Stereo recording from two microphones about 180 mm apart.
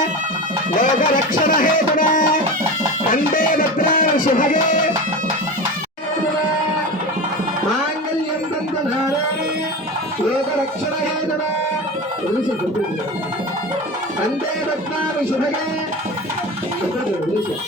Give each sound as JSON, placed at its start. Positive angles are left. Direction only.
{"t": 0.8, "sound": "music", "side_deg": 50}